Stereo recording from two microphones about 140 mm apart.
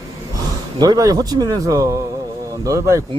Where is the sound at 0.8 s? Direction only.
25° right (ahead or behind).